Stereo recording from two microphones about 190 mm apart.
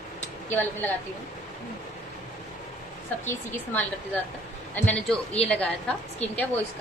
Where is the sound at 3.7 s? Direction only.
10° left (ahead or behind).